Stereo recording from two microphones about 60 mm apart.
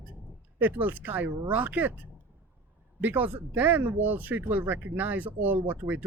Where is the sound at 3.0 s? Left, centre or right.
Right.